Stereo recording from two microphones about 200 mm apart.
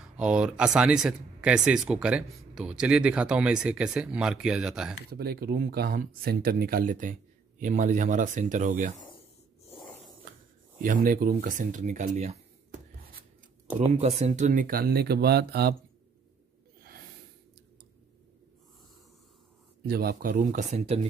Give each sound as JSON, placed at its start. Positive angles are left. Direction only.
{"t": 0.0, "sound": "speech", "side_deg": -5}
{"t": 5.1, "sound": "speech", "side_deg": -50}
{"t": 9.8, "sound": "a sound", "side_deg": 0}
{"t": 10.8, "sound": "speech", "side_deg": -45}
{"t": 13.9, "sound": "speech", "side_deg": -30}
{"t": 19.8, "sound": "speech", "side_deg": -50}
{"t": 20.8, "sound": "speech", "side_deg": -30}